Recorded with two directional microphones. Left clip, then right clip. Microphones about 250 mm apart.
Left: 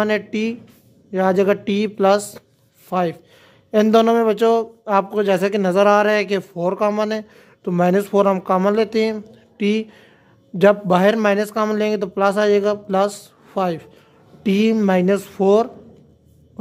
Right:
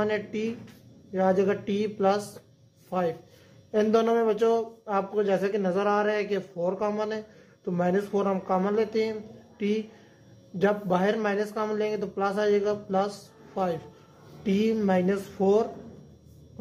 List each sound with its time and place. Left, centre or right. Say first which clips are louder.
0.0 s speech: left 8 dB; left